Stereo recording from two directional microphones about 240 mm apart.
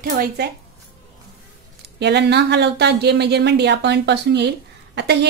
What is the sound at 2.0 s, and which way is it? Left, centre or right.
A woman's voice, right.